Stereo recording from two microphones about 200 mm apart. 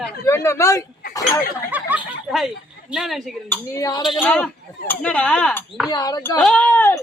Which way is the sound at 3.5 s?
15° left (ahead or behind).